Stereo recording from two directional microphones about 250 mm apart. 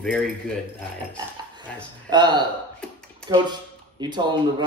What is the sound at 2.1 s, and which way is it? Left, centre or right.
Speech, centre.